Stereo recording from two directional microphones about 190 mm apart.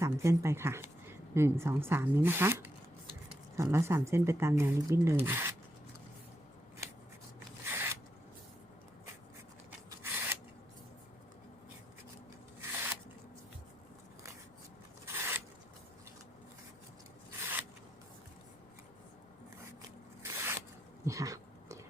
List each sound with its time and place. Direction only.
0.0 s speech: 15° right (ahead or behind)
7.6 s zipper: 10° right (ahead or behind)
10.0 s scissors: 10° right (ahead or behind)
12.7 s a sound: 10° right (ahead or behind)
15.0 s a sound: 10° right (ahead or behind)
20.2 s zipper: 15° right (ahead or behind)
21.0 s dog: 15° right (ahead or behind)